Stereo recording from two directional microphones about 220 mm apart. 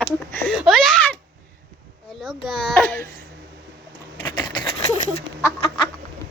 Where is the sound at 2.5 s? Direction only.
5° left (ahead or behind).